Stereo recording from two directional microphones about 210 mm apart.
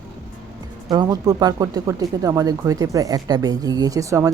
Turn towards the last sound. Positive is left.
turn(degrees=-15)  # may be behind; listen again after turning